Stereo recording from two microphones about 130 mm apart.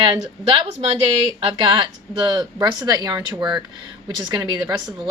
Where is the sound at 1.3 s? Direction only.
35° right (ahead or behind).